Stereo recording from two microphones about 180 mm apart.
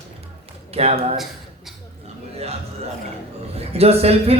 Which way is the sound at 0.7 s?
35° right (ahead or behind).